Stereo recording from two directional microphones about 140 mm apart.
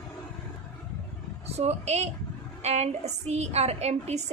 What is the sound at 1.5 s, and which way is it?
A woman's voice, 50° right (ahead or behind).